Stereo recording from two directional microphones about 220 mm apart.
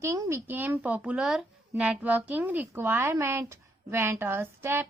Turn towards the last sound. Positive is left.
turn(degrees=-10)  # may be behind; listen again after turning